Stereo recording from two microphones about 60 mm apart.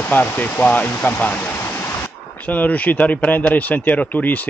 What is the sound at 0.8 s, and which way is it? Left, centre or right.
Waterfall, left.